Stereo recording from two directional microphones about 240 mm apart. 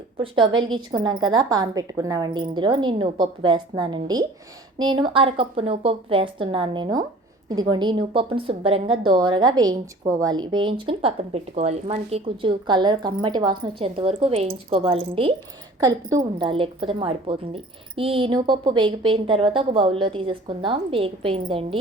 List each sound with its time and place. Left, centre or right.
0.2 s a woman's voice: right